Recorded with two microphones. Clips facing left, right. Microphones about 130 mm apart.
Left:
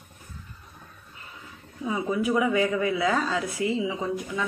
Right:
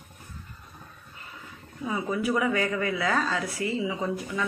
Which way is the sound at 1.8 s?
10° left (ahead or behind).